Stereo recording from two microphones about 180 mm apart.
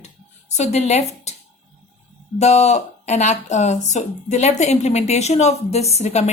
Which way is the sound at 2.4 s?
40° left (ahead or behind).